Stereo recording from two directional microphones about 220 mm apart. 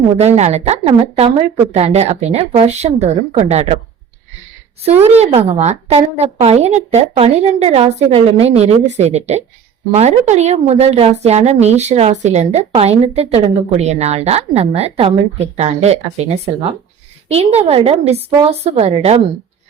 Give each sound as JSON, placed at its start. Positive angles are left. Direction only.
{"t": 0.2, "sound": "a woman's voice", "side_deg": -30}
{"t": 5.0, "sound": "a woman's voice", "side_deg": -30}